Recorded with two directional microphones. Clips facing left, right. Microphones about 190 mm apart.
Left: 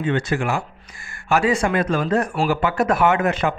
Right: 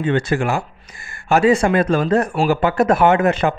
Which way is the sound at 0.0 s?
30° right (ahead or behind).